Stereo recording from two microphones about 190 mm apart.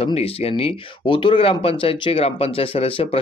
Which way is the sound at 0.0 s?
30° left (ahead or behind).